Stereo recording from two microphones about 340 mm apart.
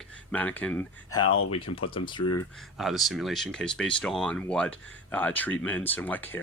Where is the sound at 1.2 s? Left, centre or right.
Left.